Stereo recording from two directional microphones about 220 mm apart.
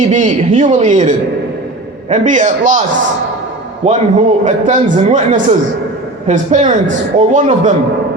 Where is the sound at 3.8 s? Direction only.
30° right (ahead or behind).